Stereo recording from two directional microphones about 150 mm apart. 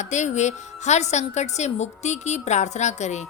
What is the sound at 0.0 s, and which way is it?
A woman's voice, 50° left (ahead or behind).